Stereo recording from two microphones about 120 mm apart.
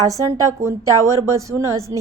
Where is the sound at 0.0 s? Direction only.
30° right (ahead or behind).